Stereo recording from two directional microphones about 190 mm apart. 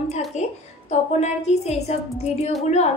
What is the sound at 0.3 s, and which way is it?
A woman's voice, 35° left (ahead or behind).